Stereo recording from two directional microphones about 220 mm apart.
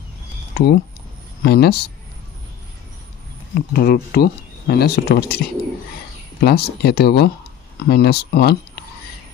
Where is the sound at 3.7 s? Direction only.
45° left (ahead or behind).